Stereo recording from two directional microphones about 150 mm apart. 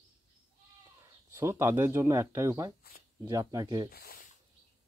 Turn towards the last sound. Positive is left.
turn(degrees=85)